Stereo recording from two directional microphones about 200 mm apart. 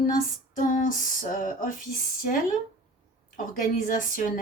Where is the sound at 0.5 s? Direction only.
40° left (ahead or behind).